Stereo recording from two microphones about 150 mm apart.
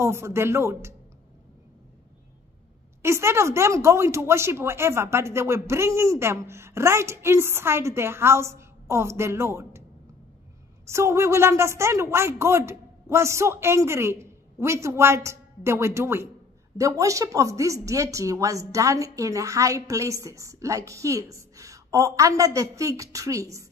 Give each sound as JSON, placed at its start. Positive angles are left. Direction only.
{"t": 0.0, "sound": "speech", "side_deg": -20}
{"t": 3.0, "sound": "speech", "side_deg": -20}
{"t": 10.9, "sound": "speech", "side_deg": -20}